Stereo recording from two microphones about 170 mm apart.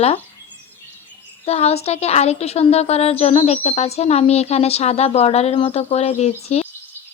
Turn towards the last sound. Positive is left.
turn(degrees=40)  # may be behind; listen again after turning